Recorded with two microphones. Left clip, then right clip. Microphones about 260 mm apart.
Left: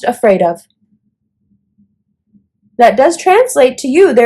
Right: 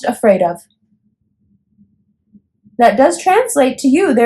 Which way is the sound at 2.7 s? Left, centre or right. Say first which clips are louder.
Left 2 dB; left.